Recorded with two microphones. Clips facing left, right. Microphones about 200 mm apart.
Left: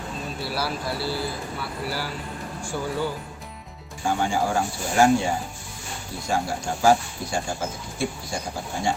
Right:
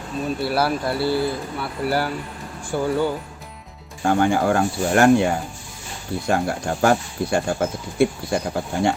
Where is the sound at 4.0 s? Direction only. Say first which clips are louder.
Right 5 dB; 60° right (ahead or behind).